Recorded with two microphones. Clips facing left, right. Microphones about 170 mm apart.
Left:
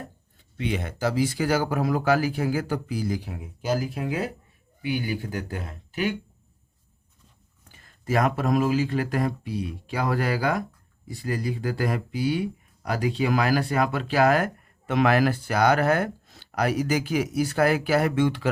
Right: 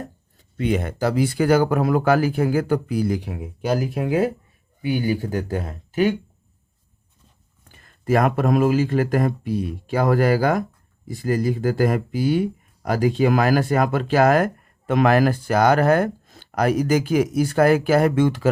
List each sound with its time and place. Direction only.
0.0 s speech: 45° right (ahead or behind)
4.8 s speech: 45° right (ahead or behind)
8.0 s speech: 50° right (ahead or behind)